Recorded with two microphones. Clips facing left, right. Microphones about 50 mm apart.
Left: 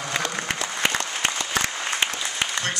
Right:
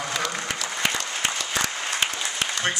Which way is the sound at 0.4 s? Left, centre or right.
Left.